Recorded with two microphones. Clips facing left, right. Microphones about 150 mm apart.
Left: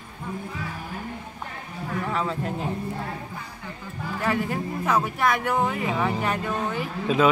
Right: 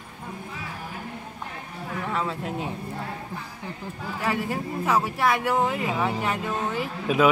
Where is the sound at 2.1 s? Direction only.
Centre (ahead or behind).